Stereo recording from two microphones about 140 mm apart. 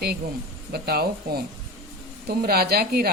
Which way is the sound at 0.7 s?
90° right.